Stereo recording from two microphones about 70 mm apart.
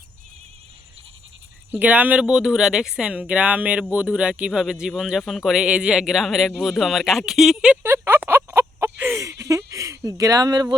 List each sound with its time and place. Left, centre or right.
1.7 s speech: right
2.2 s speech: centre
7.6 s speech: centre
7.9 s a sound: right
9.7 s speech: right